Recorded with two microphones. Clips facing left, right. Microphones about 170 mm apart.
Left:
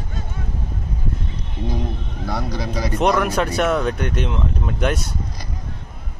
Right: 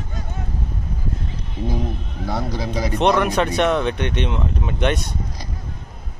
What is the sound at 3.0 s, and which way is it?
Speech, centre (ahead or behind).